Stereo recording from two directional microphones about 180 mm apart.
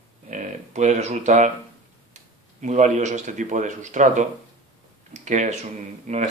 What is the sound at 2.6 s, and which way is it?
Speech, 40° right (ahead or behind).